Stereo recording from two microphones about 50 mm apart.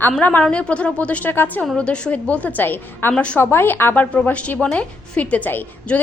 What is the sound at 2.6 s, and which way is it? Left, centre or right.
A woman's voice, left.